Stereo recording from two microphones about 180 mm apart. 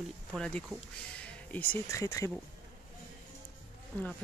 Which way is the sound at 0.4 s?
5° left (ahead or behind).